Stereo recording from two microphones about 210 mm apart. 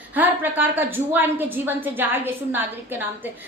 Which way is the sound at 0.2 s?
10° right (ahead or behind).